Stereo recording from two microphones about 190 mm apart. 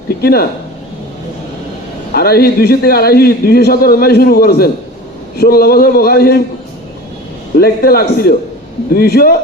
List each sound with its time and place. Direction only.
0.2 s speech: 55° left (ahead or behind)
2.1 s a man's voice: 55° left (ahead or behind)
7.6 s a man's voice: 55° left (ahead or behind)